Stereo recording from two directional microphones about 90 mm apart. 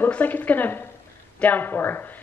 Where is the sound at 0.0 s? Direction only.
20° left (ahead or behind).